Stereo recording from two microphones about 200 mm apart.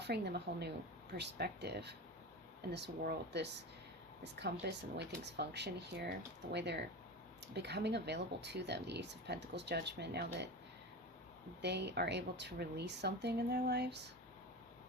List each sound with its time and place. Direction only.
0.0 s speech: 55° right (ahead or behind)
11.6 s speech: 55° right (ahead or behind)